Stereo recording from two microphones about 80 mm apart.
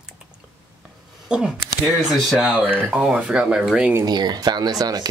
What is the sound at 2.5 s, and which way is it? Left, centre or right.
Speech, centre.